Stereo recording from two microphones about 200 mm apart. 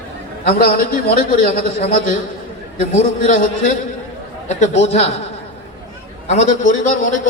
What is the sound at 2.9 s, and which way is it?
Speech, 40° left (ahead or behind).